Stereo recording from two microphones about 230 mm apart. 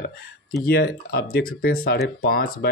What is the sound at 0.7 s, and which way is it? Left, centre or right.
Speech, left.